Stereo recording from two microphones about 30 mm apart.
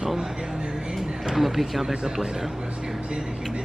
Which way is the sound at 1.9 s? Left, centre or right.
Right.